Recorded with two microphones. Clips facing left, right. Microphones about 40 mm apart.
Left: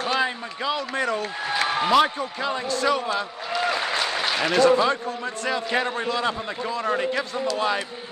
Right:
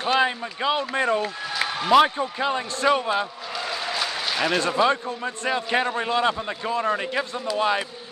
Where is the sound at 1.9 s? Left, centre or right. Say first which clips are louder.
Right 5 dB; centre.